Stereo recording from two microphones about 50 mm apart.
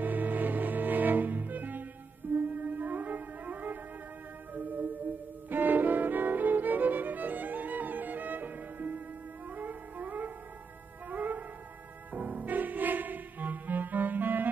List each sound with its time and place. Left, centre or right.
0.0 s music: right
5.5 s violin: right
9.5 s music: right